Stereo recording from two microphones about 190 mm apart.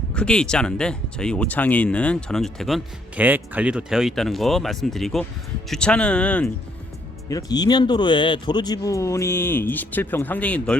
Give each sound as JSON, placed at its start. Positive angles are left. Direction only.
{"t": 0.1, "sound": "speech", "side_deg": 5}
{"t": 7.3, "sound": "speech", "side_deg": 20}